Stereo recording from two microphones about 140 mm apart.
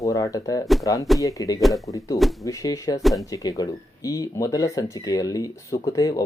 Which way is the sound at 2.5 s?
25° left (ahead or behind).